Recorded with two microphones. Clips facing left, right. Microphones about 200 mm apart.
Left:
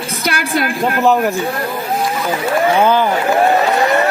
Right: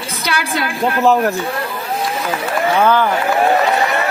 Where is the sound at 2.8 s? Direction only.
15° left (ahead or behind).